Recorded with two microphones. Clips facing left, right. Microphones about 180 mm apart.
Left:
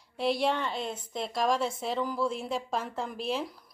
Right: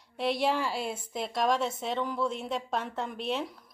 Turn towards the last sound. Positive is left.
turn(degrees=0)  # may be behind; listen again after turning